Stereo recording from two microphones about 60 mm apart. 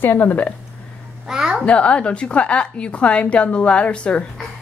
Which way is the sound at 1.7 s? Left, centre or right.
Centre.